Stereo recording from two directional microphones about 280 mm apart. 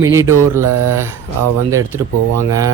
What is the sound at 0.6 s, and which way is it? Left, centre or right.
Mantra, right.